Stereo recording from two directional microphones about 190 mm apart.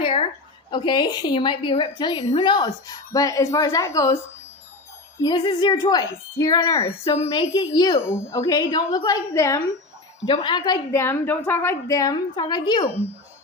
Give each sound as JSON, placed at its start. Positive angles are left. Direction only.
{"t": 0.0, "sound": "a sound", "side_deg": 30}
{"t": 0.7, "sound": "a woman's voice", "side_deg": 25}
{"t": 5.2, "sound": "a woman's voice", "side_deg": 25}